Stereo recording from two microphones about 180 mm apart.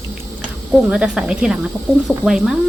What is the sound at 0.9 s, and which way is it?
Speech, 5° right (ahead or behind).